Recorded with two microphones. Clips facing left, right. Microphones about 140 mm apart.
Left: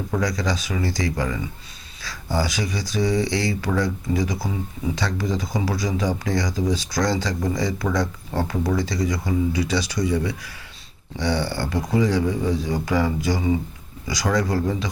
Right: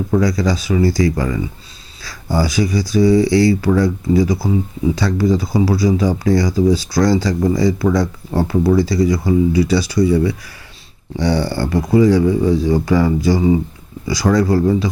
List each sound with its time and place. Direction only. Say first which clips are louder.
0.2 s speech: right 7 dB; 35° right (ahead or behind)